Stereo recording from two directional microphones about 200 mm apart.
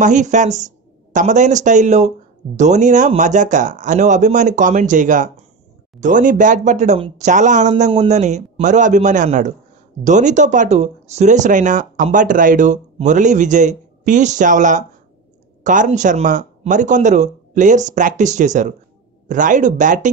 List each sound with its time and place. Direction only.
0.0 s speech: 35° right (ahead or behind)